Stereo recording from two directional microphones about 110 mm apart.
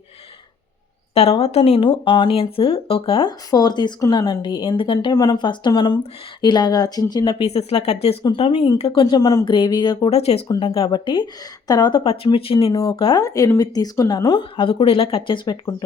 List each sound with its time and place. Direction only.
1.1 s speech: 70° left (ahead or behind)
3.2 s speech: 40° left (ahead or behind)
5.1 s speech: 35° left (ahead or behind)
5.4 s speech: 45° left (ahead or behind)
7.4 s speech: 70° left (ahead or behind)
8.2 s speech: 50° left (ahead or behind)
10.1 s speech: 65° left (ahead or behind)
10.6 s speech: 55° left (ahead or behind)
10.8 s speech: 45° left (ahead or behind)
12.0 s speech: 60° left (ahead or behind)
12.6 s speech: 35° left (ahead or behind)
13.0 s speech: 50° left (ahead or behind)
13.2 s speech: 30° left (ahead or behind)
14.5 s speech: 50° left (ahead or behind)